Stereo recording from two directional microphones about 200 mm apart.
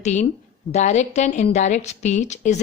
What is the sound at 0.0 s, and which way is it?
A woman's voice, 35° left (ahead or behind).